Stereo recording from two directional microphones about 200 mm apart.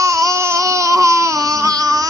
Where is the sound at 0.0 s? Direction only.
15° right (ahead or behind).